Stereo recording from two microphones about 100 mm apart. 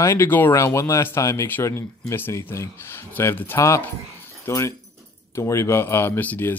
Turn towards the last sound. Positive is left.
turn(degrees=15)  # may be behind; listen again after turning